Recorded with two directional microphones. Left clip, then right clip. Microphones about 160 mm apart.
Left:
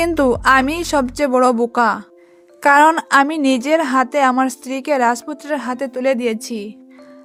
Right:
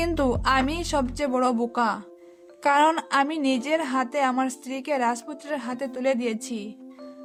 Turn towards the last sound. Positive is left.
turn(degrees=40)  # may be behind; listen again after turning